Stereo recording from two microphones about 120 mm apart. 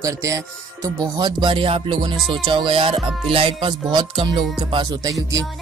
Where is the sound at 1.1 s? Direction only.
40° right (ahead or behind).